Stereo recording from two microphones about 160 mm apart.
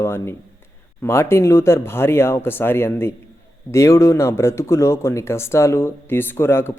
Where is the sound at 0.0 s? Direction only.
15° left (ahead or behind).